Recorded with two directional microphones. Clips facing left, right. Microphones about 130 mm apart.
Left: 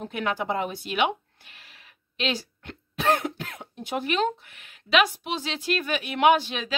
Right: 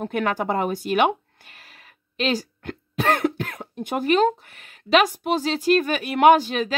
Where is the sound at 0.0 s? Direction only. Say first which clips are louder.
Right 5 dB; 50° right (ahead or behind).